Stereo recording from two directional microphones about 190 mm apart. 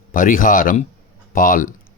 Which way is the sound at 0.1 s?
45° left (ahead or behind).